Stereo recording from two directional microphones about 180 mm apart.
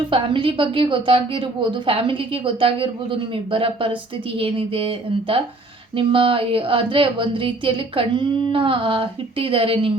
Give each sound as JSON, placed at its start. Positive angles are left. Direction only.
{"t": 0.1, "sound": "speech", "side_deg": -30}